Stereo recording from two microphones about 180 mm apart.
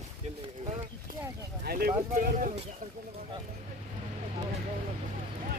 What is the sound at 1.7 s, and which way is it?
Speech, 55° right (ahead or behind).